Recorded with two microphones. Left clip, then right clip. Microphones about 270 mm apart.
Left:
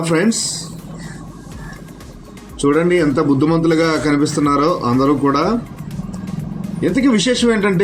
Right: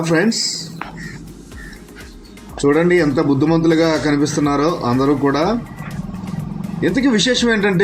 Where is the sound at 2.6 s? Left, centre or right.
Centre.